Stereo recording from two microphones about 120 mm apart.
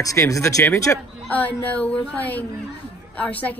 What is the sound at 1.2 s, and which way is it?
A woman's voice, 10° left (ahead or behind).